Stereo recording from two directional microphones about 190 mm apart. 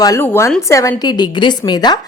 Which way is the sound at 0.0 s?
15° left (ahead or behind).